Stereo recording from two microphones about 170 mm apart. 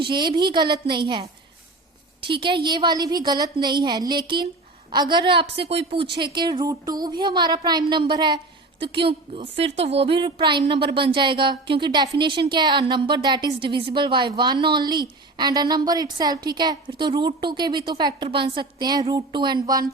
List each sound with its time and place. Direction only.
0.0 s a woman's voice: 25° right (ahead or behind)